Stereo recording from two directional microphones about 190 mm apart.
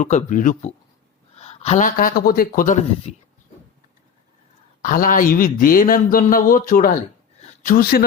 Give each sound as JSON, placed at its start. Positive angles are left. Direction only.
{"t": 0.0, "sound": "speech", "side_deg": 40}
{"t": 1.4, "sound": "a sound", "side_deg": 35}
{"t": 2.0, "sound": "a man's voice", "side_deg": 50}
{"t": 3.1, "sound": "speech", "side_deg": 35}
{"t": 4.8, "sound": "a man's voice", "side_deg": 45}